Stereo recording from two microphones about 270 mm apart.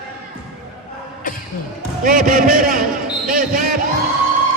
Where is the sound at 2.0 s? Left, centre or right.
Right.